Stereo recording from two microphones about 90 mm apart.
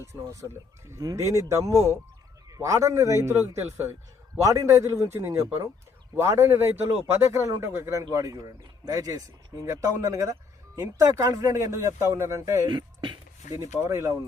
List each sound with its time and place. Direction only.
0.0 s a man's voice: 35° right (ahead or behind)
12.6 s speech: 55° right (ahead or behind)
13.6 s a man's voice: 30° right (ahead or behind)